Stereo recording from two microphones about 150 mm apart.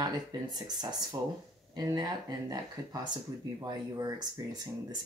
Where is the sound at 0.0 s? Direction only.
25° right (ahead or behind).